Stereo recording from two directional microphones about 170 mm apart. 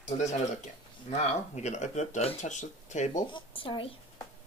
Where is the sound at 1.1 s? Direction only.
40° left (ahead or behind).